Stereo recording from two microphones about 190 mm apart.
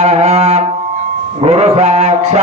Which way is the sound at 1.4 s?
35° right (ahead or behind).